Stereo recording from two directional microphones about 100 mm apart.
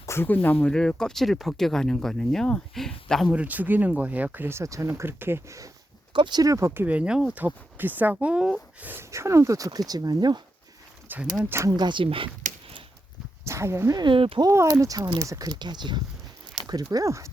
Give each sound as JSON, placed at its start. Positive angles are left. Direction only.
{"t": 0.0, "sound": "a sound", "side_deg": 25}
{"t": 0.6, "sound": "speech", "side_deg": 10}
{"t": 3.3, "sound": "speech", "side_deg": -15}
{"t": 6.1, "sound": "speech", "side_deg": -50}
{"t": 6.4, "sound": "speech", "side_deg": -30}
{"t": 7.4, "sound": "speech", "side_deg": -20}
{"t": 9.0, "sound": "speech", "side_deg": -30}
{"t": 11.1, "sound": "speech", "side_deg": -20}
{"t": 11.7, "sound": "speech", "side_deg": -50}
{"t": 13.5, "sound": "speech", "side_deg": -25}
{"t": 13.9, "sound": "speech", "side_deg": -55}
{"t": 14.4, "sound": "speech", "side_deg": -35}